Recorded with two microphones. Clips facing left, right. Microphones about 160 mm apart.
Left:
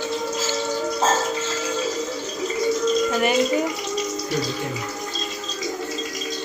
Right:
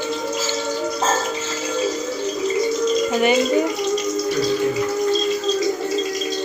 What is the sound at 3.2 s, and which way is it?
Bathtub, centre (ahead or behind).